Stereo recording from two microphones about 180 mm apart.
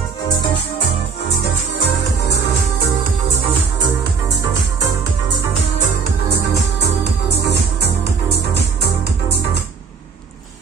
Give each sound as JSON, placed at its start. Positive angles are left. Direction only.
{"t": 7.4, "sound": "music", "side_deg": -70}